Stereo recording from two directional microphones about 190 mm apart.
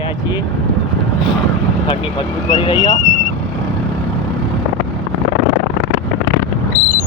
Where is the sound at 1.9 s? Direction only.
25° left (ahead or behind).